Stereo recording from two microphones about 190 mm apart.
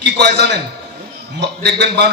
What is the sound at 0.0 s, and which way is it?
A man's voice, 60° right (ahead or behind).